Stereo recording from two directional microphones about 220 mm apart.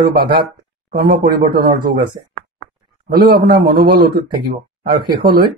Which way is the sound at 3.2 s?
45° right (ahead or behind).